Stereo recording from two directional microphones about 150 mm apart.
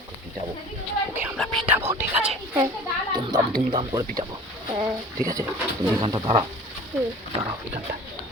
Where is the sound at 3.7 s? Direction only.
30° right (ahead or behind).